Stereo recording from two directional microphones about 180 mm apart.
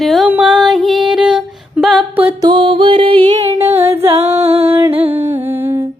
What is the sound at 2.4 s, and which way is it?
Music, 30° right (ahead or behind).